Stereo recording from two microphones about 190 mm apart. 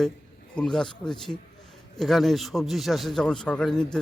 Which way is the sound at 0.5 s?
5° left (ahead or behind).